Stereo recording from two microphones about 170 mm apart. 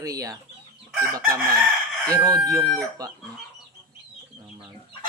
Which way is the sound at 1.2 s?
15° right (ahead or behind).